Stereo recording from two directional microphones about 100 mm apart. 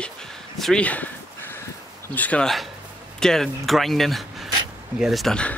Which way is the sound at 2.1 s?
15° left (ahead or behind).